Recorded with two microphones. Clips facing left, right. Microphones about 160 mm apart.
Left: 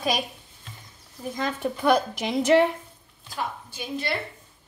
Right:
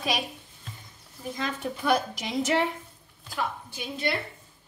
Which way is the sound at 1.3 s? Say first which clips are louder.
Left 4 dB; 55° left (ahead or behind).